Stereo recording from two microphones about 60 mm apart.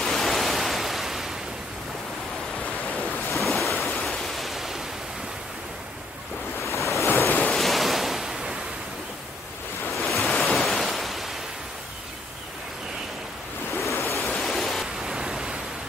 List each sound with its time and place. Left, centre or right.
0.0 s pink noise: centre
3.3 s ocean: centre
6.6 s waves: left
7.1 s waves: left
7.4 s waves: centre
10.0 s waves: centre
13.9 s waves: left
14.2 s pink noise: centre